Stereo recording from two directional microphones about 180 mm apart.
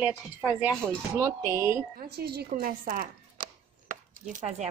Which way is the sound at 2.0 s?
65° right (ahead or behind).